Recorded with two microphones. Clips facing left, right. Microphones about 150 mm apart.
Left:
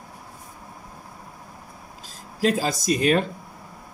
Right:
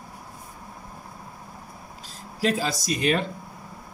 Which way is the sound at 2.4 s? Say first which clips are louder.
Left 2 dB; 45° left (ahead or behind).